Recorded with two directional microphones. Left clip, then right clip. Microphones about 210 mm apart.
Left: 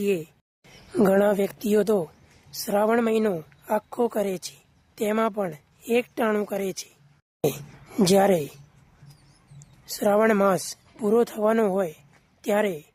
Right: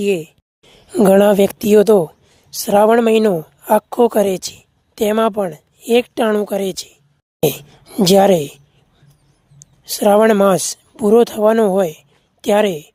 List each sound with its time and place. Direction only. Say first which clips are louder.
0.0 s speech: right 8 dB; 30° right (ahead or behind)
9.6 s speech: right 10 dB; 30° right (ahead or behind)